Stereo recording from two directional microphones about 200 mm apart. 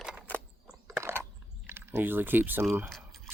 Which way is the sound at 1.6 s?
10° right (ahead or behind).